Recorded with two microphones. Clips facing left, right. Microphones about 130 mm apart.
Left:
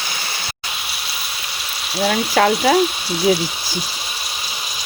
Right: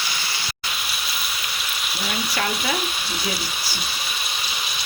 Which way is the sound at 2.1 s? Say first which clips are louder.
Left 10 dB; 90° left.